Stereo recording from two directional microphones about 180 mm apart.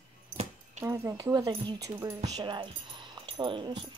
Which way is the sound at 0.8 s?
15° right (ahead or behind).